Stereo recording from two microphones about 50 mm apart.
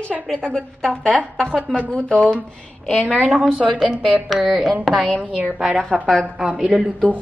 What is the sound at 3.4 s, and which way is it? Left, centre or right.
A woman's voice, centre.